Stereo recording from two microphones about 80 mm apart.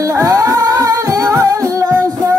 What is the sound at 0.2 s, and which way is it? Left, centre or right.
Music, right.